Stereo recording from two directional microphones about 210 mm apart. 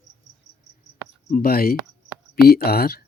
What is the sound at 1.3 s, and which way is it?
Speech, 45° left (ahead or behind).